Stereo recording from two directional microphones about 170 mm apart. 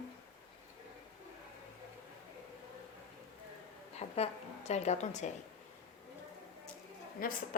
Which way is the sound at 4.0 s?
40° left (ahead or behind).